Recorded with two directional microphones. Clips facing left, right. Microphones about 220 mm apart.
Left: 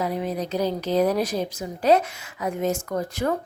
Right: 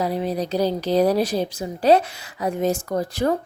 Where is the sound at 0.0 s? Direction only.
35° right (ahead or behind).